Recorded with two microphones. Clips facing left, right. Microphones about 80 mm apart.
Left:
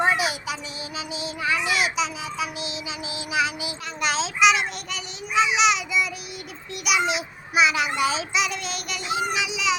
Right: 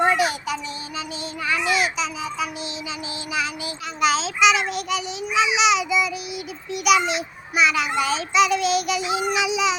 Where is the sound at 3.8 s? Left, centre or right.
Centre.